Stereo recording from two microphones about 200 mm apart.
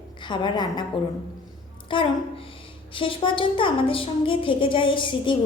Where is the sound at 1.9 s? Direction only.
25° left (ahead or behind).